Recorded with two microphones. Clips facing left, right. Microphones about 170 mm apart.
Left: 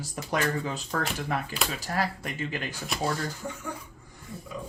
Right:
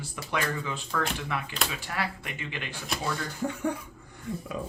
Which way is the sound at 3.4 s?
65° right (ahead or behind).